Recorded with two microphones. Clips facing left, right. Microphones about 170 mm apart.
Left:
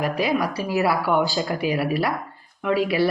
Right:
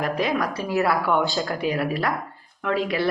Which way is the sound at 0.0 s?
5° left (ahead or behind).